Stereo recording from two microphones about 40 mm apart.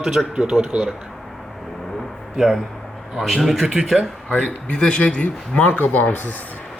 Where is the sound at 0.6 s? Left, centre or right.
Right.